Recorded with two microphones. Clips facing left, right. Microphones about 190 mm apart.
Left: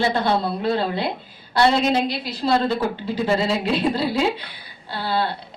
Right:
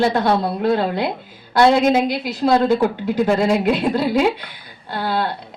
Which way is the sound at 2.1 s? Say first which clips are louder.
Right 5 dB; 50° right (ahead or behind).